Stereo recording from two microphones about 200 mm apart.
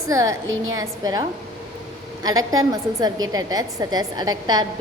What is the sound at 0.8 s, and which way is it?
A woman's voice, 15° right (ahead or behind).